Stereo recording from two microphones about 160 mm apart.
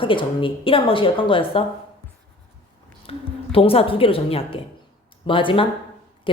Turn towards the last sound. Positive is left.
turn(degrees=35)  # may be behind; listen again after turning